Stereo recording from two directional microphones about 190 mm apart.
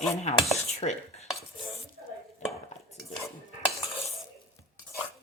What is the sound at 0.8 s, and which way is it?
Cutlery, 35° left (ahead or behind).